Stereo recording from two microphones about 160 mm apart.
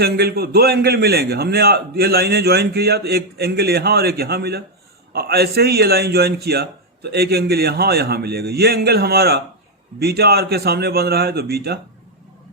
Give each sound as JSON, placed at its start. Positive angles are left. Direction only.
{"t": 0.0, "sound": "a man's voice", "side_deg": -80}